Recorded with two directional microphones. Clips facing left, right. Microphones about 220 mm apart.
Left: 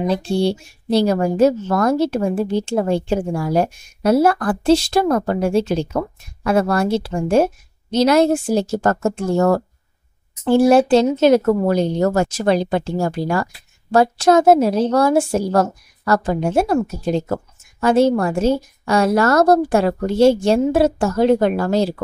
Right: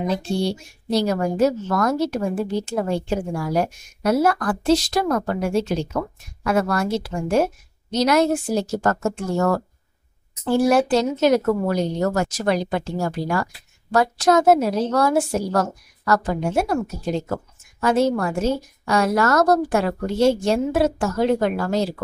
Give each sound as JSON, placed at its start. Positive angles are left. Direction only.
{"t": 0.1, "sound": "a woman's voice", "side_deg": 30}